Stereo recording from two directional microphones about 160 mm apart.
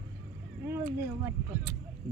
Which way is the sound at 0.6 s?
15° right (ahead or behind).